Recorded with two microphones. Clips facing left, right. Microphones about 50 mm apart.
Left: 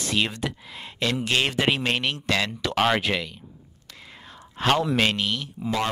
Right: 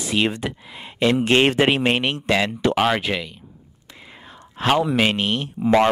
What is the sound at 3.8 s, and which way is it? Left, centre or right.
Whispering, centre.